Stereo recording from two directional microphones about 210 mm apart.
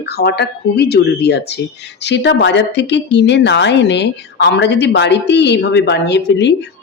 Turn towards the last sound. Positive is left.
turn(degrees=55)  # may be behind; listen again after turning